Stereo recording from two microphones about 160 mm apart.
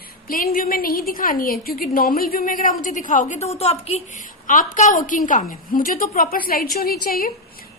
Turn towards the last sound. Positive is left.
turn(degrees=65)  # may be behind; listen again after turning